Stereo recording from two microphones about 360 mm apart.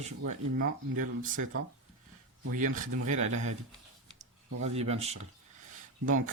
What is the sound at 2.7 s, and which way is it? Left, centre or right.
Speech, right.